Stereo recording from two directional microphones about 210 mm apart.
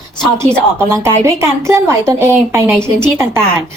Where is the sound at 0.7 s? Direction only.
15° right (ahead or behind).